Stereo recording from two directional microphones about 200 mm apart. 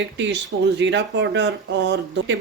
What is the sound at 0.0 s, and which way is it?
Speech, 65° right (ahead or behind).